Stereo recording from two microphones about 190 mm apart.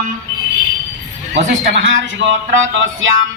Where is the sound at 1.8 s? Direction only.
70° right (ahead or behind).